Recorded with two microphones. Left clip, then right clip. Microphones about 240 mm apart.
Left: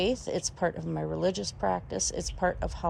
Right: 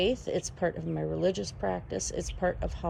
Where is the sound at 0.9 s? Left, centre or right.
Left.